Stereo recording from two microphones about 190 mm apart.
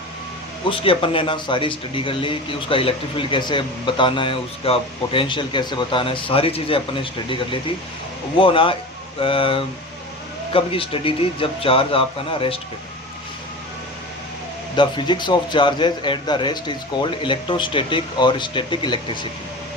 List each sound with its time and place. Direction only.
0.7 s a man's voice: 30° left (ahead or behind)
14.8 s a man's voice: 25° left (ahead or behind)